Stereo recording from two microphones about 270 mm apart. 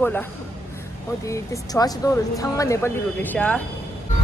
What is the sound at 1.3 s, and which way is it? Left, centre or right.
A woman's voice, centre.